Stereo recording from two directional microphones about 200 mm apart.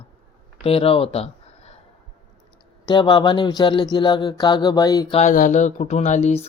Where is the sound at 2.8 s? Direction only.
25° left (ahead or behind).